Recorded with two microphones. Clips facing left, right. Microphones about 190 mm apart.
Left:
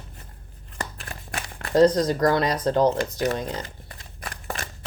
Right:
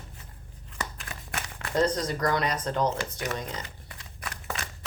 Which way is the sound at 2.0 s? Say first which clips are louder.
Left 7 dB; 35° left (ahead or behind).